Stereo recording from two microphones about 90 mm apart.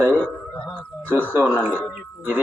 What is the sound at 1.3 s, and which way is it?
Speech, 20° right (ahead or behind).